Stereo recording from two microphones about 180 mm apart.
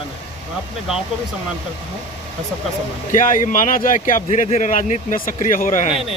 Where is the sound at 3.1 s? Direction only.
45° left (ahead or behind).